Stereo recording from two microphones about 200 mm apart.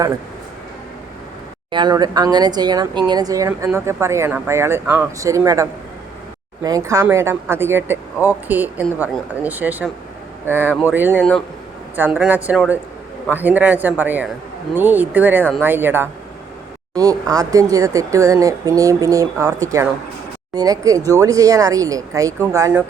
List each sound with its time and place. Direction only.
1.7 s speech: 20° right (ahead or behind)
11.2 s speech: centre (ahead or behind)
11.9 s speech: 10° right (ahead or behind)